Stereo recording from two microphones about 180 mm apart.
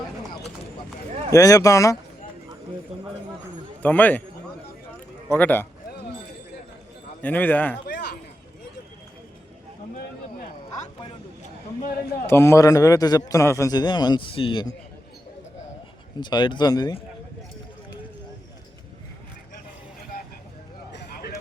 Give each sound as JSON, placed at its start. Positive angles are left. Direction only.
{"t": 1.3, "sound": "a man's voice", "side_deg": 20}
{"t": 3.8, "sound": "a man's voice", "side_deg": 10}
{"t": 5.3, "sound": "a man's voice", "side_deg": 10}
{"t": 7.2, "sound": "a man's voice", "side_deg": 10}
{"t": 7.9, "sound": "a sound", "side_deg": 60}
{"t": 12.2, "sound": "a man's voice", "side_deg": 15}
{"t": 16.2, "sound": "a man's voice", "side_deg": 25}
{"t": 20.9, "sound": "a sound", "side_deg": 60}